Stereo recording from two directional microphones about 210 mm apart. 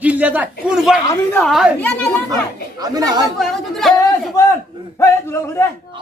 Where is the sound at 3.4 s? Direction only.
Centre (ahead or behind).